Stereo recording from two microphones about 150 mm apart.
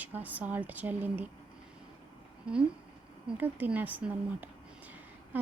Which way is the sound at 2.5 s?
5° right (ahead or behind).